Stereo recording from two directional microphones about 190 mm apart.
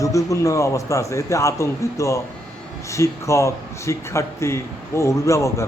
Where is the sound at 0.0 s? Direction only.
15° left (ahead or behind).